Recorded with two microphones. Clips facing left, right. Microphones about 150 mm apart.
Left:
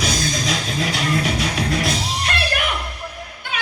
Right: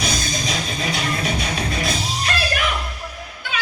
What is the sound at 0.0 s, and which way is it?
Music, 90° left.